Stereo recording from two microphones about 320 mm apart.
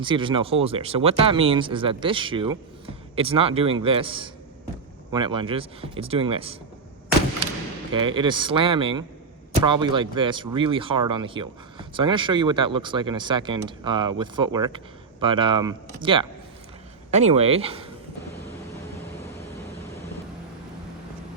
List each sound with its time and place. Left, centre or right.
0.0 s speech: centre
7.9 s speech: centre